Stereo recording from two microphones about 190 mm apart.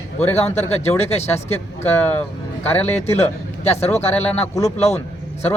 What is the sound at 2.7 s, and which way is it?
Speech, 35° left (ahead or behind).